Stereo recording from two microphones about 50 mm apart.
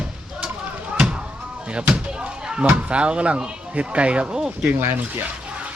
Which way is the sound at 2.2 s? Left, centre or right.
Centre.